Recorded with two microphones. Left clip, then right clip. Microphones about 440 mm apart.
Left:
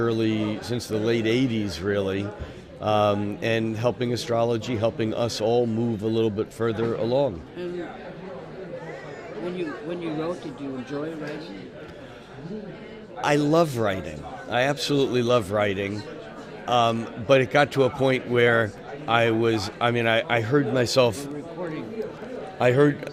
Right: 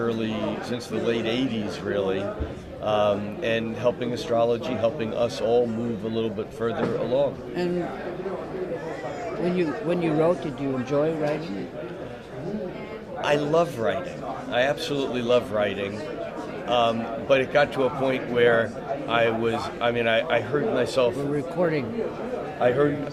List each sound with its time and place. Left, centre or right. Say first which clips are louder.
0.0 s a man's voice: left 2 dB; left
9.6 s speech: right 6 dB; centre
13.2 s a man's voice: left 1 dB; left
21.6 s speech: right 9 dB; right
22.5 s a man's voice: left 2 dB; left